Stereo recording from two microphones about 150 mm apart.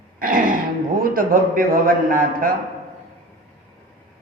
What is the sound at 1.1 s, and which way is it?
Speech, 65° right (ahead or behind).